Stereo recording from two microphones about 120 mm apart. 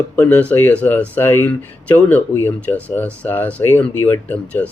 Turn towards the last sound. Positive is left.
turn(degrees=15)  # may be behind; listen again after turning